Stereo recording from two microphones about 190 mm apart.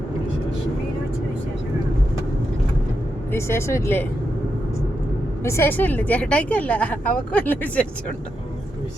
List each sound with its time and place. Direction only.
3.3 s a woman's voice: 15° left (ahead or behind)
5.4 s a woman's voice: 15° left (ahead or behind)